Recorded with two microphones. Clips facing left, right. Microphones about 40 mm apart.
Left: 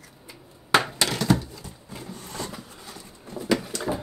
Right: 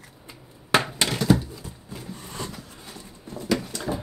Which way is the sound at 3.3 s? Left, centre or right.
Centre.